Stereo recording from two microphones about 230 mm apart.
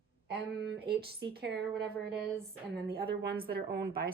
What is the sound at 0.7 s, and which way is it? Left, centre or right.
Speech, right.